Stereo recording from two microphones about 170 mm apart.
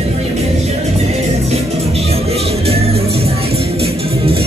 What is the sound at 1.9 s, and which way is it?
Music, 35° right (ahead or behind).